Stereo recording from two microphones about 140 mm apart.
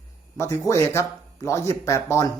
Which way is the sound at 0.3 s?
20° left (ahead or behind).